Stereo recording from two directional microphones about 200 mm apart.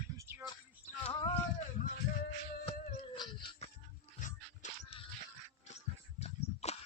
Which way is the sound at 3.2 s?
25° left (ahead or behind).